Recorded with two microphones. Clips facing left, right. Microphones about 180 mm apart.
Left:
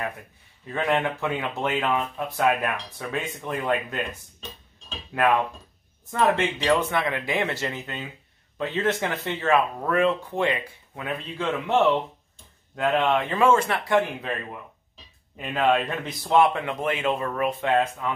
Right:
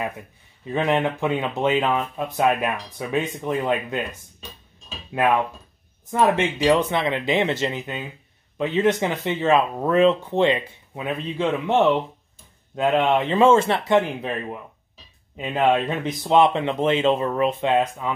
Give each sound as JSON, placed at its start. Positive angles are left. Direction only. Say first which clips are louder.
{"t": 0.7, "sound": "speech", "louder": "right 3 dB", "side_deg": -20}
{"t": 6.3, "sound": "speech", "louder": "right 4 dB", "side_deg": -20}